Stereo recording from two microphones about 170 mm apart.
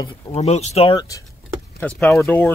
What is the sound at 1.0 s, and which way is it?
Speech, 20° left (ahead or behind).